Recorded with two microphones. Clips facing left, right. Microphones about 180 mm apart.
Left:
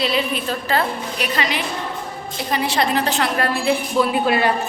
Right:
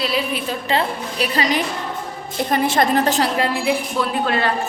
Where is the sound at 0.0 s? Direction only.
5° right (ahead or behind).